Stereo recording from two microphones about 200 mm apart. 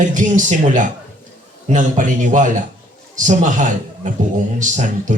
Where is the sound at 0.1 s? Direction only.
40° right (ahead or behind).